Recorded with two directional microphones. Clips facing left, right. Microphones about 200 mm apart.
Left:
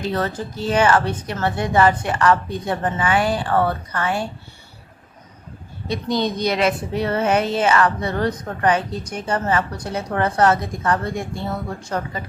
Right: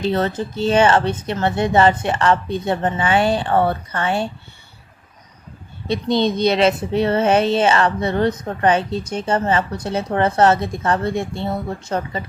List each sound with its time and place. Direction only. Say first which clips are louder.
0.0 s speech: right 4 dB; 25° right (ahead or behind)
5.9 s speech: right 4 dB; 25° right (ahead or behind)